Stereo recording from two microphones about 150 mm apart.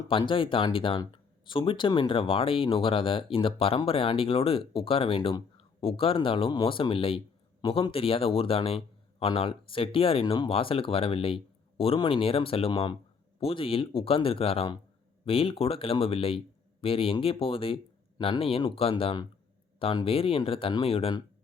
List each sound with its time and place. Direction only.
0.1 s speech: 35° left (ahead or behind)